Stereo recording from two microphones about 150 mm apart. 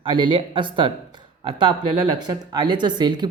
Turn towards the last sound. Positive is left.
turn(degrees=-30)  # may be behind; listen again after turning